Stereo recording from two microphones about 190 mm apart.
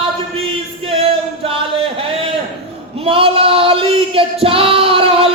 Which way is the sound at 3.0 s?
30° right (ahead or behind).